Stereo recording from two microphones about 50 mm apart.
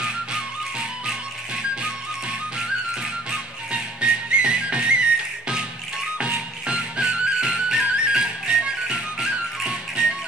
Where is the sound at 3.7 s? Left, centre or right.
Right.